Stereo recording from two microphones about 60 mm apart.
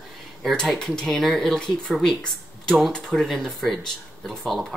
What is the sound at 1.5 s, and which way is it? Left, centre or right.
Speech, centre.